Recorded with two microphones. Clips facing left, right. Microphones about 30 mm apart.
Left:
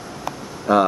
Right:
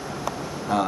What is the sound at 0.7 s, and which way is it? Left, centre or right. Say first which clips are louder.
Speech: left 8 dB; centre.